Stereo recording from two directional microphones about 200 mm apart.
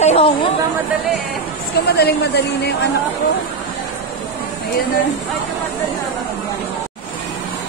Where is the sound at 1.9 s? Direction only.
55° left (ahead or behind).